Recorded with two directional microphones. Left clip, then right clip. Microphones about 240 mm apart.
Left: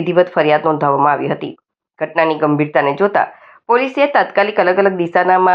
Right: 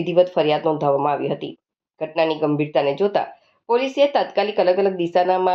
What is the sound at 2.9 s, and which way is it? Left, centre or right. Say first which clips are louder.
Speech: left 6 dB; centre.